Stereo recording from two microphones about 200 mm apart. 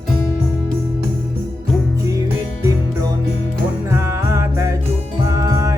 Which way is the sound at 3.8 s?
15° right (ahead or behind).